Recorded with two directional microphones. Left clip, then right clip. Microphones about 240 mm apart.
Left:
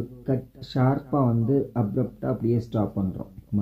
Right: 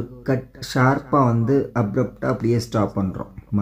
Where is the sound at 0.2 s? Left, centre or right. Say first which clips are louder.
Right 5 dB; centre.